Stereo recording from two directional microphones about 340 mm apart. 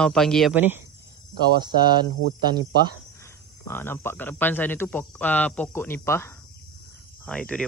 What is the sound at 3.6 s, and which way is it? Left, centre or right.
Speech, centre.